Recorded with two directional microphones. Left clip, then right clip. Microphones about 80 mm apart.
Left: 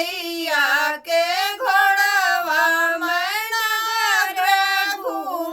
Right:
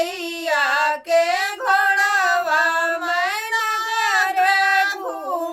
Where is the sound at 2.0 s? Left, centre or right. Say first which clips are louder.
Even; left.